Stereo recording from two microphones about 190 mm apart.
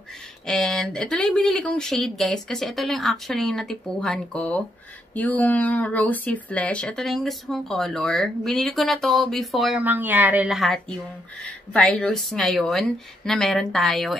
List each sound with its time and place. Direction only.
0.5 s speech: centre (ahead or behind)